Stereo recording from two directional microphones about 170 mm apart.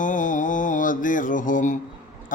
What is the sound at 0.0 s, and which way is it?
Mantra, 50° left (ahead or behind).